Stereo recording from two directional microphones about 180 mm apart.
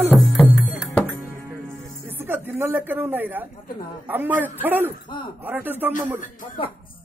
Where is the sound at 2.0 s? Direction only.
10° right (ahead or behind).